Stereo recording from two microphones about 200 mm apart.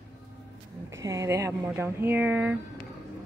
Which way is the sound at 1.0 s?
15° right (ahead or behind).